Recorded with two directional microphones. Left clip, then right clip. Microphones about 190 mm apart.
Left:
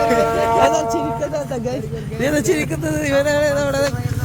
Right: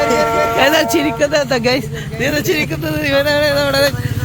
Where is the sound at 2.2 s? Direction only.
20° left (ahead or behind).